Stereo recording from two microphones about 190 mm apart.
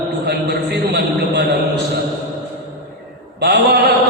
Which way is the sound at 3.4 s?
60° right (ahead or behind).